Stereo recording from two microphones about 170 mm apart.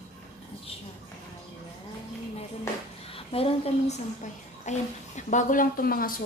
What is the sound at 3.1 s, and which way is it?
A woman's voice, 35° left (ahead or behind).